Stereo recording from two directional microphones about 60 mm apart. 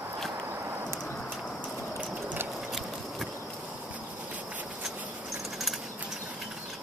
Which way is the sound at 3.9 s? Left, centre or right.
Right.